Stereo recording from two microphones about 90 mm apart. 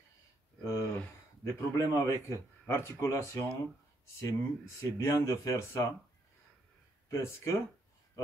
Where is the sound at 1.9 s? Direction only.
30° left (ahead or behind).